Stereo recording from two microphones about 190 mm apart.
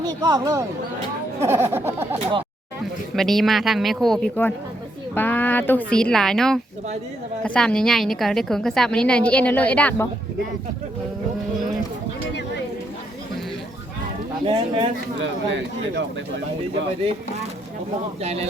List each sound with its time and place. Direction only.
0.0 s speech: 20° right (ahead or behind)
3.2 s a woman's voice: centre (ahead or behind)
14.4 s a man's voice: 25° right (ahead or behind)
15.2 s speech: 75° right (ahead or behind)